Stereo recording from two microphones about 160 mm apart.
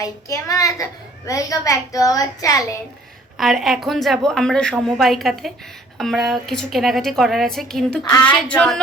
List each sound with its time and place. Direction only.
0.0 s a child's voice: 20° left (ahead or behind)
3.3 s a woman's voice: centre (ahead or behind)